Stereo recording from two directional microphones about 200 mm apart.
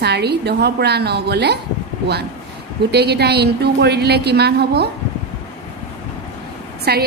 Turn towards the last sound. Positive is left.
turn(degrees=-50)  # may be behind; listen again after turning